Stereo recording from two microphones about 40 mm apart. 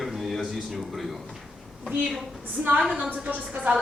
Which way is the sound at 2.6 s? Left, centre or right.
Right.